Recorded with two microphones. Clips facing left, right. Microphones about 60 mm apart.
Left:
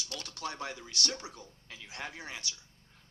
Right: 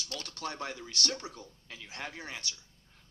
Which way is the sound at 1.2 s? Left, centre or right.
Centre.